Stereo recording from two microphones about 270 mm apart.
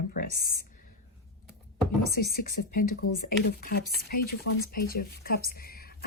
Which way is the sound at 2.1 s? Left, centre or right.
Left.